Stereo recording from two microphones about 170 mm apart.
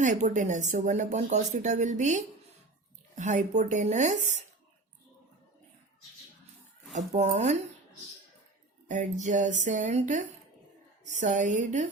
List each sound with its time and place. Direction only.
0.0 s speech: 45° right (ahead or behind)
6.9 s speech: 40° right (ahead or behind)
8.9 s speech: 45° right (ahead or behind)